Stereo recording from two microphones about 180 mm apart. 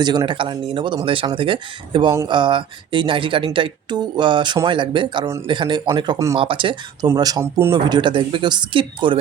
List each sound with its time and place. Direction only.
0.0 s speech: 25° right (ahead or behind)